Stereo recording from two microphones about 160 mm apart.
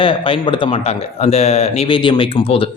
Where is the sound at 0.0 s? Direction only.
35° left (ahead or behind).